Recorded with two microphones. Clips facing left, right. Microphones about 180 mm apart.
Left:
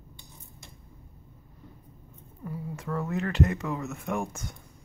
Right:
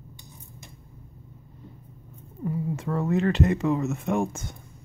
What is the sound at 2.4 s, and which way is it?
Speech, 25° right (ahead or behind).